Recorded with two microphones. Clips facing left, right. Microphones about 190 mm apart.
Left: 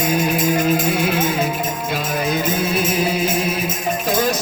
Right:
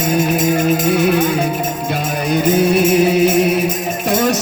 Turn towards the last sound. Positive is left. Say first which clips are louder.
# right 7 dB
turn(degrees=-60)  # may be behind; listen again after turning